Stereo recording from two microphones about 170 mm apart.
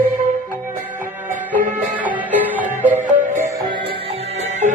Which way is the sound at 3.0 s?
50° right (ahead or behind).